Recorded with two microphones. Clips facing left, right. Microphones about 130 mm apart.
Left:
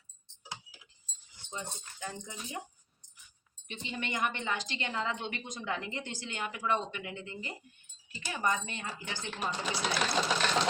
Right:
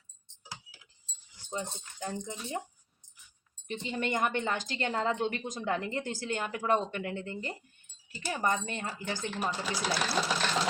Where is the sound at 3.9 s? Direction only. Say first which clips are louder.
Right 4 dB; 40° right (ahead or behind).